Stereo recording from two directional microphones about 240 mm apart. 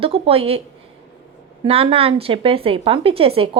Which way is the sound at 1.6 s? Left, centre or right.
Right.